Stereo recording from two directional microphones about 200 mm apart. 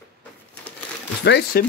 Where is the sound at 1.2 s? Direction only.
60° left (ahead or behind).